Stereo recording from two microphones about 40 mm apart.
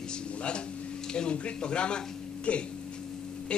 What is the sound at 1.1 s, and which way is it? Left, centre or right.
Speech, left.